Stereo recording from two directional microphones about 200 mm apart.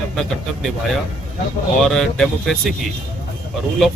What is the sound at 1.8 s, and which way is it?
Speech, centre (ahead or behind).